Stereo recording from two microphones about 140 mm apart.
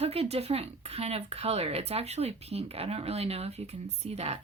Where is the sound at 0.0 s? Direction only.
45° right (ahead or behind).